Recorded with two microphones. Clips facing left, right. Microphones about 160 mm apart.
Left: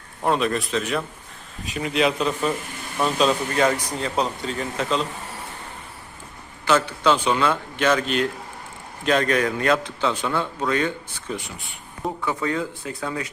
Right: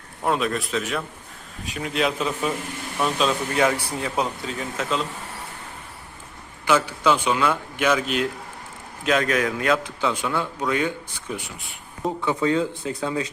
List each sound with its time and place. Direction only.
0.3 s speech: centre (ahead or behind)
6.7 s speech: 10° right (ahead or behind)
12.2 s speech: 20° right (ahead or behind)